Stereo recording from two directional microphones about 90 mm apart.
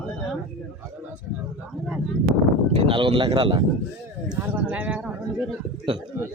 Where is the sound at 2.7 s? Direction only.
75° right (ahead or behind).